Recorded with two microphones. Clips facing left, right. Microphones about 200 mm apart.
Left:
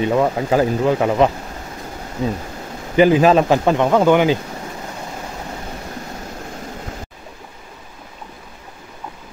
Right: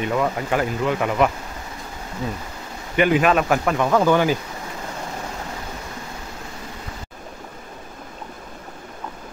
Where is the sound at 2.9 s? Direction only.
30° left (ahead or behind).